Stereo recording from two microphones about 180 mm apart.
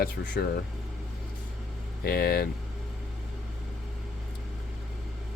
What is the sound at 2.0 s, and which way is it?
Speech, 60° left (ahead or behind).